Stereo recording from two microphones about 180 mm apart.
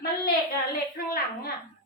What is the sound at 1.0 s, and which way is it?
Speech, 55° left (ahead or behind).